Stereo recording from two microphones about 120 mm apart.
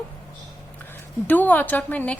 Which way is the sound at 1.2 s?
15° left (ahead or behind).